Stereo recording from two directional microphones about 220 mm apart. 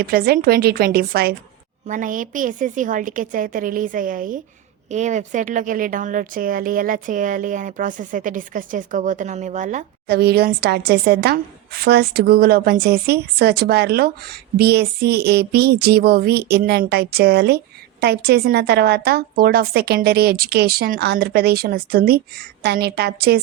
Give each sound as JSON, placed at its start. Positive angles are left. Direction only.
{"t": 0.0, "sound": "a woman's voice", "side_deg": -45}
{"t": 10.1, "sound": "a woman's voice", "side_deg": -45}